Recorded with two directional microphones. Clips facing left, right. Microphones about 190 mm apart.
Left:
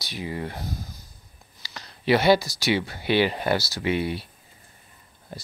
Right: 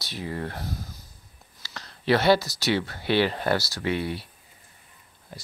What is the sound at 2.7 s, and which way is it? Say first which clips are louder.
Speech: left 1 dB; 10° left (ahead or behind).